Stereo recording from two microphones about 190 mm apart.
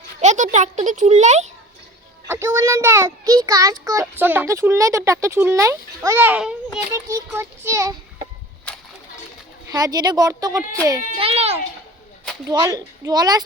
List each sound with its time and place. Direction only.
0.2 s a child's voice: 40° right (ahead or behind)
2.2 s speech: 10° right (ahead or behind)
8.7 s a sound: 5° left (ahead or behind)
9.7 s speech: 20° right (ahead or behind)
11.2 s a child's voice: 30° right (ahead or behind)
12.5 s speech: 20° right (ahead or behind)